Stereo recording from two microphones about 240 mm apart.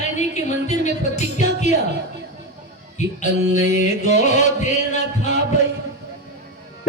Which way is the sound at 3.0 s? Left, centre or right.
Left.